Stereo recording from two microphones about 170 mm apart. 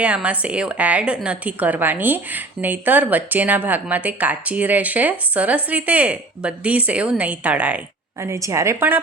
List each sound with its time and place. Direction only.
0.0 s a woman's voice: 10° right (ahead or behind)